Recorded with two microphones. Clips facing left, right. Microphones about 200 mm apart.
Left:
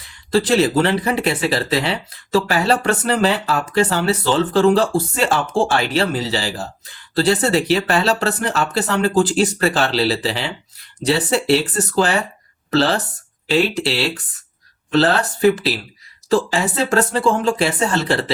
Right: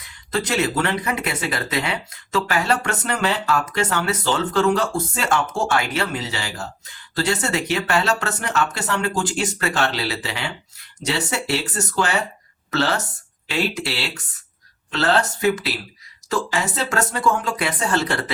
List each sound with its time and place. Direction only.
0.0 s speech: 30° left (ahead or behind)